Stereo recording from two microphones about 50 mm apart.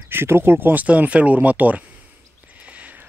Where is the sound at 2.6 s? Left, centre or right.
Right.